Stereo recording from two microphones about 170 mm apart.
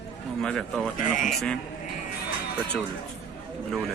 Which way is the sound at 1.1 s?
50° left (ahead or behind).